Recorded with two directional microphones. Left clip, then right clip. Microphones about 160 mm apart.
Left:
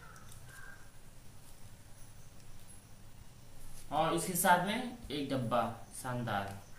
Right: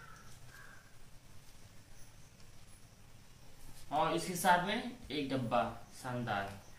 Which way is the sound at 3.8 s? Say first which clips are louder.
Left 1 dB; 15° left (ahead or behind).